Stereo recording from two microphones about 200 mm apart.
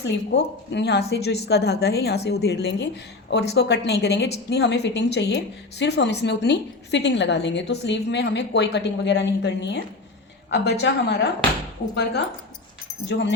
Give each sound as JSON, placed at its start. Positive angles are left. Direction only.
{"t": 0.0, "sound": "a woman's voice", "side_deg": 60}
{"t": 13.1, "sound": "a woman's voice", "side_deg": 60}